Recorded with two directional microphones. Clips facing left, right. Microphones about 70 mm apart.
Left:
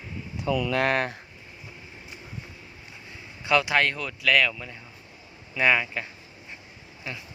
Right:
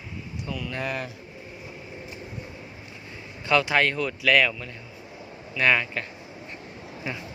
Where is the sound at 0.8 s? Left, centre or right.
Left.